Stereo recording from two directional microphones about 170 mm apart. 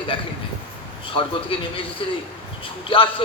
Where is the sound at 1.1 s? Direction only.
30° left (ahead or behind).